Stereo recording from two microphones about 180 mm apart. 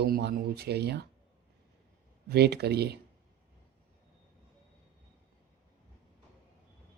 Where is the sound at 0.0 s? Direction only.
65° right (ahead or behind).